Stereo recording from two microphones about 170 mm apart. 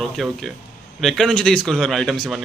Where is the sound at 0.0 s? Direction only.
Centre (ahead or behind).